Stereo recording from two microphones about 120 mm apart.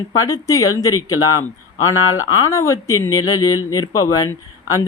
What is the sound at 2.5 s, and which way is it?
Speech, 25° left (ahead or behind).